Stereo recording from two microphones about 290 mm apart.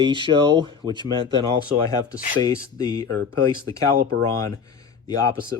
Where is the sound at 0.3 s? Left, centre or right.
Centre.